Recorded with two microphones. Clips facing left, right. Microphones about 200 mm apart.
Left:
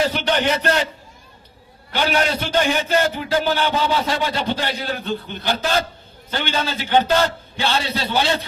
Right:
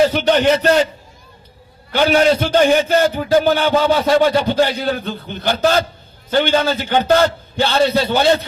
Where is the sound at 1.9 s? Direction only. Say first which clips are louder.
Right 7 dB; 50° right (ahead or behind).